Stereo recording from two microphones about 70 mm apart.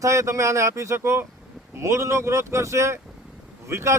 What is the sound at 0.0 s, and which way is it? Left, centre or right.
Speech, right.